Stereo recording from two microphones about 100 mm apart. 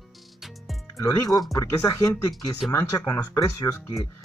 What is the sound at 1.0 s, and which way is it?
Speech, 35° left (ahead or behind).